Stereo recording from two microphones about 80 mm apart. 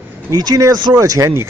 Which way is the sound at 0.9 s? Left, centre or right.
Right.